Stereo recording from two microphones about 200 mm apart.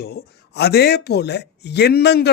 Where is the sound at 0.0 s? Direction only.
50° left (ahead or behind).